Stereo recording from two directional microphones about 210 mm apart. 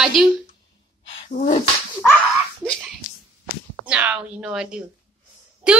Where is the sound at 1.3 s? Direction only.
35° left (ahead or behind).